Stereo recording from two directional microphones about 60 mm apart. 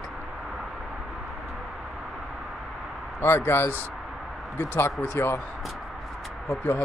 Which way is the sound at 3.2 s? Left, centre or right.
Left.